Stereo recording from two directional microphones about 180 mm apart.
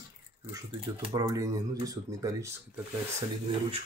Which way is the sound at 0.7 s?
20° right (ahead or behind).